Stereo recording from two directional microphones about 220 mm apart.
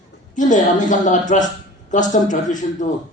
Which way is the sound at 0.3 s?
35° left (ahead or behind).